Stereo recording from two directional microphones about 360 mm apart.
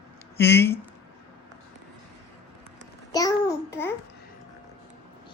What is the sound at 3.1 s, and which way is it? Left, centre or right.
Babbling, centre.